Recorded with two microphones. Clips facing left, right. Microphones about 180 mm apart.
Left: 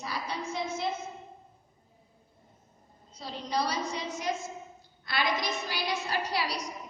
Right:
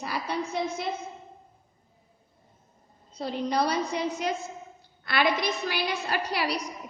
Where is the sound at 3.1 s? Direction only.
60° right (ahead or behind).